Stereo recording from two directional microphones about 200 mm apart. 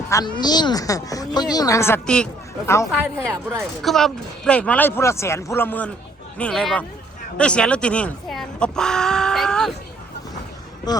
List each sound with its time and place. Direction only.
0.1 s a woman's voice: 20° left (ahead or behind); by 2.7 s 5° left (ahead or behind)
2.9 s speech: 10° right (ahead or behind)
3.8 s a woman's voice: centre (ahead or behind)